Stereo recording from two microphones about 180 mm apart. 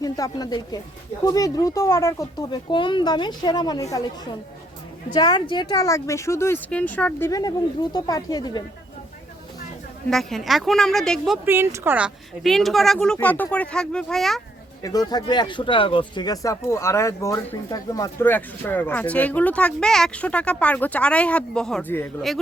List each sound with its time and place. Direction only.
0.0 s speech: 20° left (ahead or behind)
5.1 s speech: 25° left (ahead or behind); by 7.3 s 10° left (ahead or behind)
7.3 s speech: 20° left (ahead or behind)
10.1 s a woman's voice: centre (ahead or behind)
11.4 s a woman's voice: 15° right (ahead or behind)
14.8 s speech: 20° left (ahead or behind)